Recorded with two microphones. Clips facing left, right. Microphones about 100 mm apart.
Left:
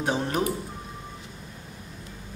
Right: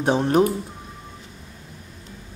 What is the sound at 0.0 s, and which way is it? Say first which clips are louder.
Speech: right 8 dB; 30° right (ahead or behind).